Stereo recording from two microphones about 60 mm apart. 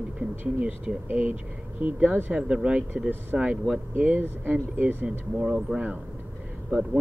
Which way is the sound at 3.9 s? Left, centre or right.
Right.